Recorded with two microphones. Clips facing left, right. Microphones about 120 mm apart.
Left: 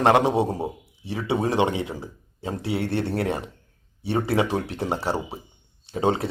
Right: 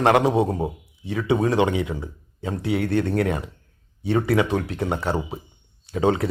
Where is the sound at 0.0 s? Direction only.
25° left (ahead or behind).